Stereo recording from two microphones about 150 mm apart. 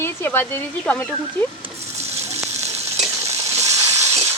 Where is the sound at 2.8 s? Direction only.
20° right (ahead or behind).